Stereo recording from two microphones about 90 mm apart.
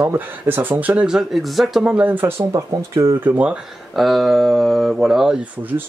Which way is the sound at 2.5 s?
35° right (ahead or behind).